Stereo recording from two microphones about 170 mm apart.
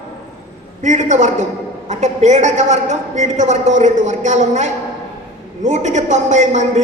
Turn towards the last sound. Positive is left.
turn(degrees=-45)  # may be behind; listen again after turning